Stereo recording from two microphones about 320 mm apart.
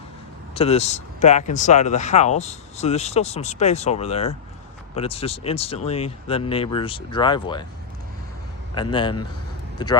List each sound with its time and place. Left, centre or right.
0.5 s speech: centre
8.7 s speech: centre